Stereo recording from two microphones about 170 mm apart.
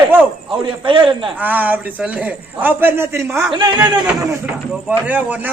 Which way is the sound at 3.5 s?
25° right (ahead or behind).